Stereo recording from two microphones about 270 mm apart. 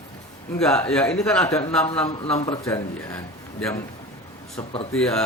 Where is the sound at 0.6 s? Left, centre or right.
Centre.